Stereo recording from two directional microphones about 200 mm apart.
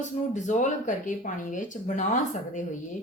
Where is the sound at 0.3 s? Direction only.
35° left (ahead or behind).